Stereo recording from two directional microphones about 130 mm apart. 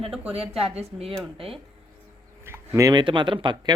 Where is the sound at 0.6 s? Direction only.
50° right (ahead or behind).